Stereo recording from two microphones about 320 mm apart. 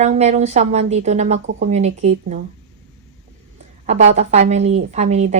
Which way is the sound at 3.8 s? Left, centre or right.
Right.